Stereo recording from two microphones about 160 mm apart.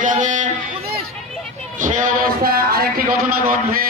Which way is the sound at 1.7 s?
55° right (ahead or behind).